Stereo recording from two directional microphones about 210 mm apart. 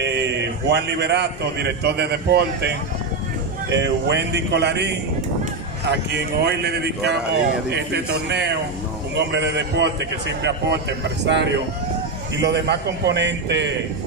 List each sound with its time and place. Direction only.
0.0 s a man's voice: 55° right (ahead or behind)
3.7 s a man's voice: 55° right (ahead or behind)